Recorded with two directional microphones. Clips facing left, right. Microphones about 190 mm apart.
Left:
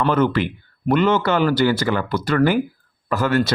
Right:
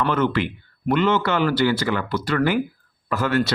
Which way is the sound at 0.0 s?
40° left (ahead or behind).